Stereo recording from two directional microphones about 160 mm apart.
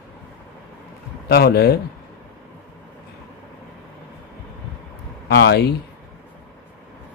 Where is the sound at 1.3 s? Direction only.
85° left.